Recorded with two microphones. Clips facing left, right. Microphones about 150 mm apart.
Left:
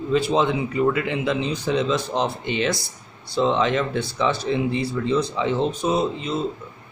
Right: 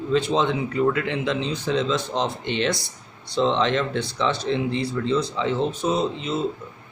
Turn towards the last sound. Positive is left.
turn(degrees=0)  # may be behind; listen again after turning